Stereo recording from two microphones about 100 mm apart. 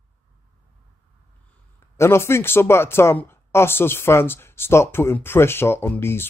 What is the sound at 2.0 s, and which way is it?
Speech, 25° left (ahead or behind).